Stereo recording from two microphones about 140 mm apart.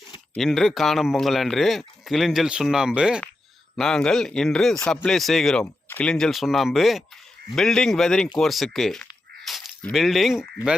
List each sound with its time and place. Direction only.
0.3 s speech: centre (ahead or behind)
9.4 s a sound: centre (ahead or behind)
9.9 s speech: centre (ahead or behind)